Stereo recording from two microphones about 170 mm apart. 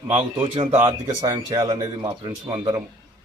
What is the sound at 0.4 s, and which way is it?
Speech, 35° right (ahead or behind).